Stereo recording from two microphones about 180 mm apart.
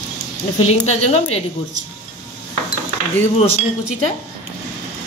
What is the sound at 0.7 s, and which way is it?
Speech, 40° left (ahead or behind).